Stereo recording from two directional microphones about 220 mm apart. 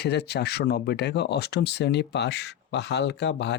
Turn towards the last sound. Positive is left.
turn(degrees=50)  # may be behind; listen again after turning